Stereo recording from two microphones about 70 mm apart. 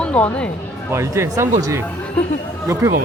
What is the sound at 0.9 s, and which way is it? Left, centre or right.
Speech, right.